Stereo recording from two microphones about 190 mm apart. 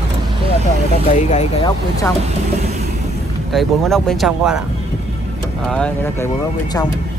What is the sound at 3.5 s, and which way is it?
Speech, centre (ahead or behind).